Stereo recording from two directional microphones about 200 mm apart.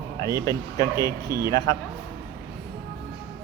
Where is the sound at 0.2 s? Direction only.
20° left (ahead or behind).